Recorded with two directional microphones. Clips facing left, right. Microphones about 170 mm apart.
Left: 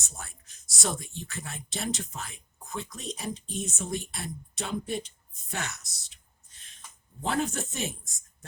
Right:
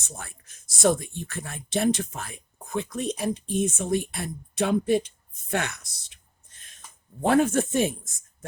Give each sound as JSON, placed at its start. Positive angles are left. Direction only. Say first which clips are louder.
{"t": 0.8, "sound": "speech", "louder": "right 11 dB", "side_deg": -55}
{"t": 7.2, "sound": "speech", "louder": "right 9 dB", "side_deg": -55}